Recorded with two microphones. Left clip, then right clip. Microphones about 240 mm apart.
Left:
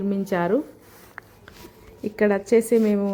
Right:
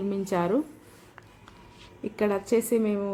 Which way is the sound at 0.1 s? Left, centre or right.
Centre.